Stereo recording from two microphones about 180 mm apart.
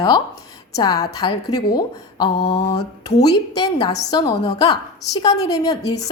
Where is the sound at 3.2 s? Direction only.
20° left (ahead or behind).